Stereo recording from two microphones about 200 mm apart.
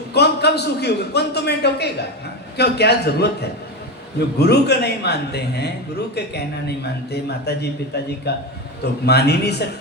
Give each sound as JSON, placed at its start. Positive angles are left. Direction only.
{"t": 0.1, "sound": "a man's voice", "side_deg": 55}
{"t": 4.4, "sound": "a man's voice", "side_deg": 55}
{"t": 7.1, "sound": "a man's voice", "side_deg": 55}